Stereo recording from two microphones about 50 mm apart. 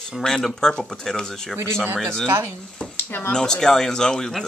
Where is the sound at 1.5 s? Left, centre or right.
Right.